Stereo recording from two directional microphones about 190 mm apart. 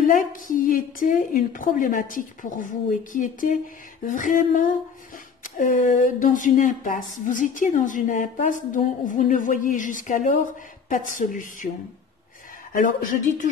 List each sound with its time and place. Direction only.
0.0 s speech: 45° left (ahead or behind)
12.7 s speech: 45° left (ahead or behind)